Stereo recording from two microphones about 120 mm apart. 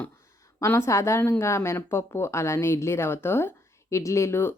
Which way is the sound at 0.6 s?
20° left (ahead or behind).